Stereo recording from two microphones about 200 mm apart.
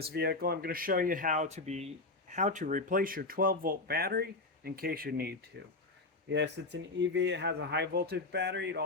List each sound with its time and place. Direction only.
0.0 s speech: 55° right (ahead or behind)
5.5 s speech: 60° right (ahead or behind)